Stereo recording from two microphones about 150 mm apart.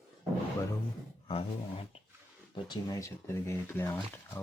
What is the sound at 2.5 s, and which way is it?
Speech, 25° left (ahead or behind).